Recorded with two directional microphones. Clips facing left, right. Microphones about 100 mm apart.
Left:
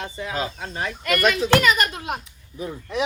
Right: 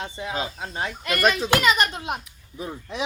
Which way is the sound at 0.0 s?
30° right (ahead or behind).